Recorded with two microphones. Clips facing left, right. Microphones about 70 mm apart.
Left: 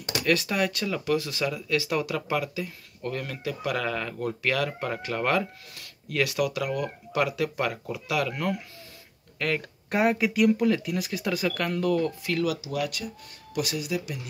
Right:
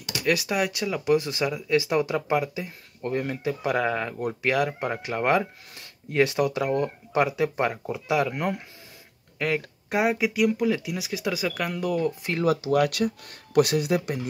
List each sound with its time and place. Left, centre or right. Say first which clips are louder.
0.2 s speech: right 1 dB; centre
9.4 s speech: right 2 dB; centre
12.2 s speech: right 3 dB; right
12.6 s speech: right 8 dB; right